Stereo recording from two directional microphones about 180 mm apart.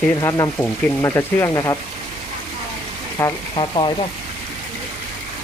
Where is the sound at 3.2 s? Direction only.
20° left (ahead or behind).